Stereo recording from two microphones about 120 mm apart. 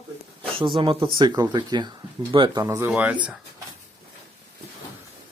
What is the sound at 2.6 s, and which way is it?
Speech, 20° right (ahead or behind).